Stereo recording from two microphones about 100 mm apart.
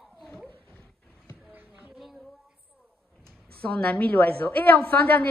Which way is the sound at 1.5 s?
15° right (ahead or behind).